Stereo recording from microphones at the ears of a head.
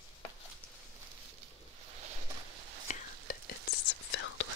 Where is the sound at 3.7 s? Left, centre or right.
Left.